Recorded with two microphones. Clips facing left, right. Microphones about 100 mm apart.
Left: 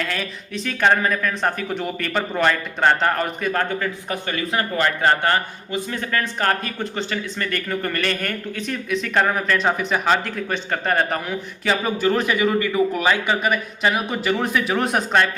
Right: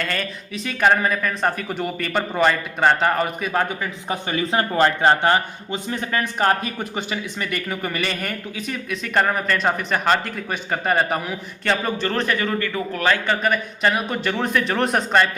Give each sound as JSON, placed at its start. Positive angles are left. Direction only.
{"t": 0.0, "sound": "speech", "side_deg": 0}